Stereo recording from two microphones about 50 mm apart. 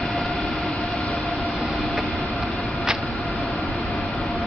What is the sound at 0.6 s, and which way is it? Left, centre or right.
Train, left.